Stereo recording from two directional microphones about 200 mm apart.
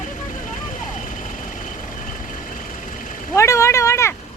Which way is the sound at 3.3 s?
15° left (ahead or behind).